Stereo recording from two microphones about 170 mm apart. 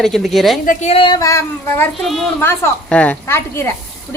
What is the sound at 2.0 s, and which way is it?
A woman's voice, centre (ahead or behind).